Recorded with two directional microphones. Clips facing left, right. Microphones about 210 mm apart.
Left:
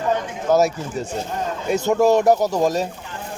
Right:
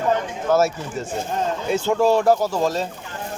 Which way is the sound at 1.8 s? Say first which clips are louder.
Left 2 dB; 15° left (ahead or behind).